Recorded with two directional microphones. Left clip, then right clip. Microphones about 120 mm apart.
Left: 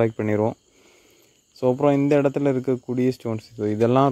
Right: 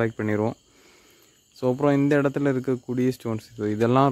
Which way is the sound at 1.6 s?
10° left (ahead or behind).